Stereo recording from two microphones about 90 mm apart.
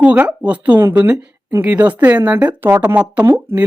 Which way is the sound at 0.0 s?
15° right (ahead or behind).